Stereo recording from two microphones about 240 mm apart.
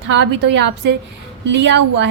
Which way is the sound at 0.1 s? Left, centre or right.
Right.